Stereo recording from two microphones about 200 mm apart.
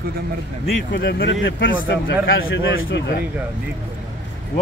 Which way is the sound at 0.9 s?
55° left (ahead or behind).